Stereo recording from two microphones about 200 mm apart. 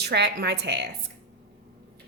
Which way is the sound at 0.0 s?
55° right (ahead or behind).